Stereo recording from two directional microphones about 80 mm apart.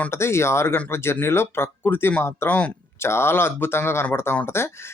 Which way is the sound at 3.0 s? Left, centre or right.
Left.